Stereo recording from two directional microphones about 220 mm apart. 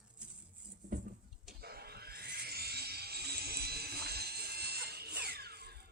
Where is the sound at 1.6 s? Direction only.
45° right (ahead or behind).